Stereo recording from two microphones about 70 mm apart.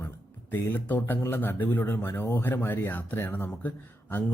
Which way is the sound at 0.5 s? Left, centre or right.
Left.